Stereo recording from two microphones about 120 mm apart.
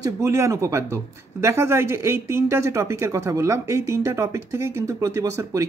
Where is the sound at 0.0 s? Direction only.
25° right (ahead or behind).